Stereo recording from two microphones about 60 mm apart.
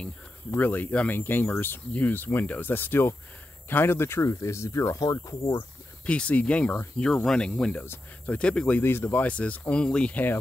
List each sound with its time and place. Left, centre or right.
0.6 s speech: left
6.0 s speech: left
8.8 s speech: left
9.1 s speech: left
10.1 s speech: left